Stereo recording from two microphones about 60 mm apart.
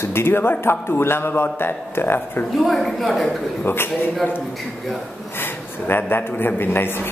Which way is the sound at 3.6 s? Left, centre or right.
Left.